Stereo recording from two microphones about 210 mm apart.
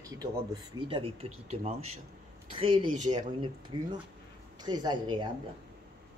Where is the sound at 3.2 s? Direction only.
20° right (ahead or behind).